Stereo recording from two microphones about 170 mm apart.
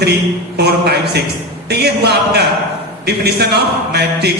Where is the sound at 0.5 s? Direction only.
75° right (ahead or behind).